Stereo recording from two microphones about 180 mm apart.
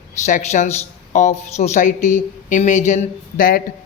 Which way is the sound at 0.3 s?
45° left (ahead or behind).